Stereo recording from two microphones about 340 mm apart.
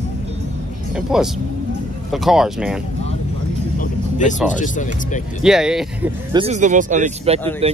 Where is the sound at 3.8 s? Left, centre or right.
Left.